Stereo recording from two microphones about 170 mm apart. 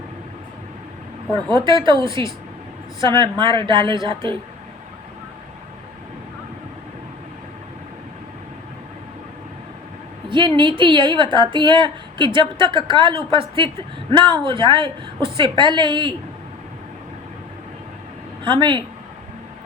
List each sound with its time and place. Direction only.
1.6 s a woman's voice: 30° right (ahead or behind)
10.2 s a woman's voice: 30° right (ahead or behind)
18.6 s a woman's voice: 30° right (ahead or behind)